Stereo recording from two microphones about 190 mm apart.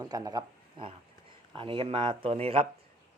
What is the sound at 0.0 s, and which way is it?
A man's voice, 20° right (ahead or behind).